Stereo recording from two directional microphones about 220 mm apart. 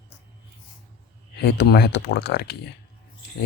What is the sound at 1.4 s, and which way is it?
Speech, 50° left (ahead or behind).